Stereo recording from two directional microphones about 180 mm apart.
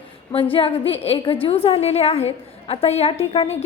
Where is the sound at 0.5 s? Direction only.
30° left (ahead or behind).